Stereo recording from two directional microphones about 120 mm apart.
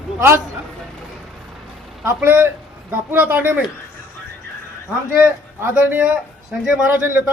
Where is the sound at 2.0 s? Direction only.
20° right (ahead or behind).